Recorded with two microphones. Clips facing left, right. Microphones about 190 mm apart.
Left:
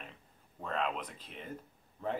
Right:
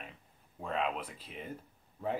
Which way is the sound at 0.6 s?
5° right (ahead or behind).